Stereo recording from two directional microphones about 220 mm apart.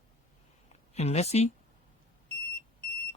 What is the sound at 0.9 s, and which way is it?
Speech, 30° left (ahead or behind).